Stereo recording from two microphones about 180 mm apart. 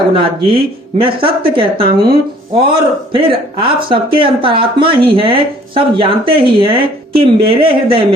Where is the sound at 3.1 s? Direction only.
30° right (ahead or behind).